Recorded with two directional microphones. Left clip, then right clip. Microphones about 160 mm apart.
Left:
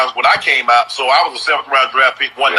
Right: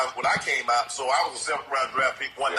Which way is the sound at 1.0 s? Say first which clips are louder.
Left 12 dB; 45° left (ahead or behind).